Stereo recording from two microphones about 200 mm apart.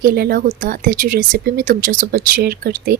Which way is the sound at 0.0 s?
50° right (ahead or behind).